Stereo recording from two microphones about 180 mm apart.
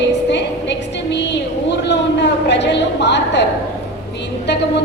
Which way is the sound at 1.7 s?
75° left (ahead or behind).